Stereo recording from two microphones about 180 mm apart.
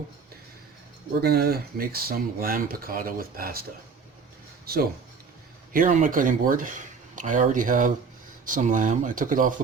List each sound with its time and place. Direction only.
1.2 s speech: 60° right (ahead or behind)
5.7 s speech: 50° right (ahead or behind)